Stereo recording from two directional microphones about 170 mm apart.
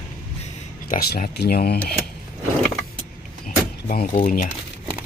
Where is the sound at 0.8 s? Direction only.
55° left (ahead or behind).